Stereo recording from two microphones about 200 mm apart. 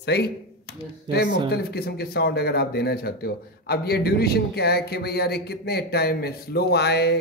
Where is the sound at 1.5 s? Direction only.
50° left (ahead or behind).